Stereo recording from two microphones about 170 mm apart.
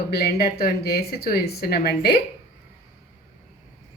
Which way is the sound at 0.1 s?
70° left (ahead or behind).